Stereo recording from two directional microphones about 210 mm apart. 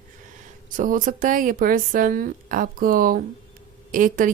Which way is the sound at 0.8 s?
40° right (ahead or behind).